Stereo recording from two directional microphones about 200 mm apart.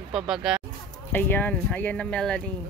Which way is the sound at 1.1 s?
10° left (ahead or behind).